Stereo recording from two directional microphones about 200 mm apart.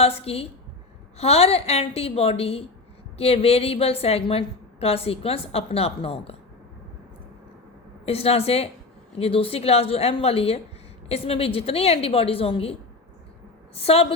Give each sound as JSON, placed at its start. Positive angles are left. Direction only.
{"t": 0.0, "sound": "a woman's voice", "side_deg": 30}
{"t": 8.0, "sound": "a woman's voice", "side_deg": 30}
{"t": 13.7, "sound": "a woman's voice", "side_deg": 30}